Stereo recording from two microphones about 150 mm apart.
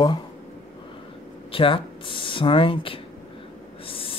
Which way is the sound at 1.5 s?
35° left (ahead or behind).